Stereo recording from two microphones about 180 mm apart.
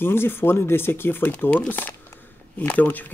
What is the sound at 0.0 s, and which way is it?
Speech, 10° left (ahead or behind).